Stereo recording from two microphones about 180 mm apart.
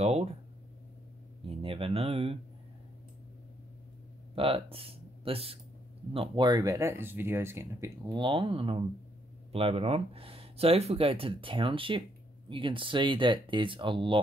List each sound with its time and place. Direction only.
0.0 s speech: 35° right (ahead or behind)
1.5 s speech: 30° right (ahead or behind)
4.4 s speech: 30° right (ahead or behind); by 8.2 s 15° right (ahead or behind)
8.2 s speech: 25° right (ahead or behind)